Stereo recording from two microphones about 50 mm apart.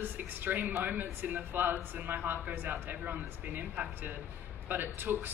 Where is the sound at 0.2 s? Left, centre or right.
Right.